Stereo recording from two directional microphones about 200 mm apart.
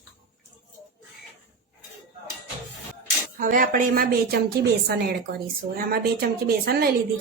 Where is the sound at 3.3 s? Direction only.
45° right (ahead or behind).